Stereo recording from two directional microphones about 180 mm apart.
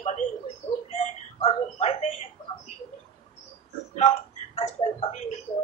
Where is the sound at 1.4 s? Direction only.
35° left (ahead or behind).